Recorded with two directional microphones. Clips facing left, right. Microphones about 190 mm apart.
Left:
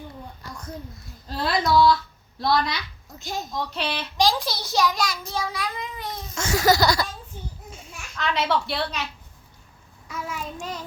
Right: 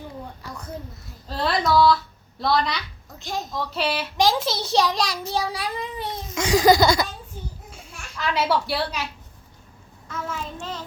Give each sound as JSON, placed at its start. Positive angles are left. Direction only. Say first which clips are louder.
{"t": 1.4, "sound": "a child's voice", "louder": "right 1 dB", "side_deg": 0}
{"t": 4.2, "sound": "a child's voice", "louder": "right 1 dB", "side_deg": -20}
{"t": 6.3, "sound": "a woman's voice", "louder": "right 4 dB", "side_deg": -15}
{"t": 8.1, "sound": "a woman's voice", "louder": "right 1 dB", "side_deg": -10}
{"t": 10.1, "sound": "child singing", "louder": "right 1 dB", "side_deg": 10}